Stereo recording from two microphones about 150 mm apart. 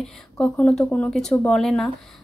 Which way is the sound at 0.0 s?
5° left (ahead or behind).